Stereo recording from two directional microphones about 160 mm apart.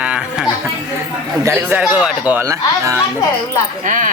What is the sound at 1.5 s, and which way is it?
A man's voice, 10° right (ahead or behind).